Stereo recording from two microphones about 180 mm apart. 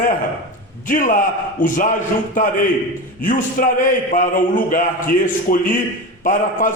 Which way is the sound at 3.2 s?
50° left (ahead or behind).